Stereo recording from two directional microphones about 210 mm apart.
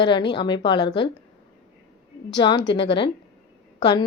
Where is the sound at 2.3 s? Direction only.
20° left (ahead or behind).